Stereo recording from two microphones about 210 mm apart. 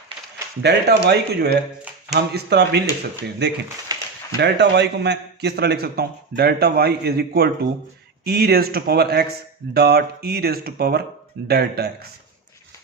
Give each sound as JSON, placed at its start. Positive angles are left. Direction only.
{"t": 0.6, "sound": "a man's voice", "side_deg": -55}